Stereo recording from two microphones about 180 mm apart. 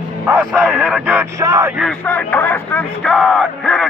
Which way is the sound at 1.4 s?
15° right (ahead or behind).